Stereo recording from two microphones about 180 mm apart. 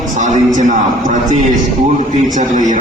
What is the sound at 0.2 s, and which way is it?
Speech, 45° right (ahead or behind).